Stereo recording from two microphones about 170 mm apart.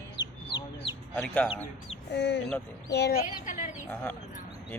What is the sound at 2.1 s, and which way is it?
Speech, 90° left.